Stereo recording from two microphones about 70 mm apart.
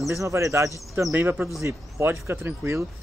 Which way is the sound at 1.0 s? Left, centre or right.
Right.